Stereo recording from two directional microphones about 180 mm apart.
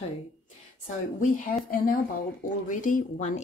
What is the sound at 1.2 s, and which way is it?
Speech, 50° left (ahead or behind).